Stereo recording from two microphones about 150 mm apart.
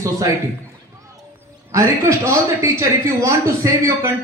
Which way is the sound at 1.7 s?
20° right (ahead or behind).